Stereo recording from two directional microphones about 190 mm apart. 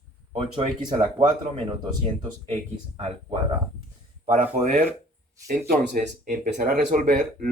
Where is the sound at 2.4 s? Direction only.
35° right (ahead or behind).